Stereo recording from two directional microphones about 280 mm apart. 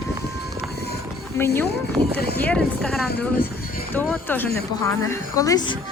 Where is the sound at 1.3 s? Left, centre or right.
Centre.